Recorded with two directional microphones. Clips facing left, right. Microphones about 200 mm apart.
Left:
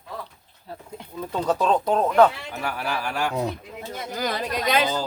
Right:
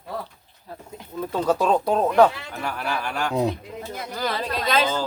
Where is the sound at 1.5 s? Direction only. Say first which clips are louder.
Right 1 dB; 10° right (ahead or behind).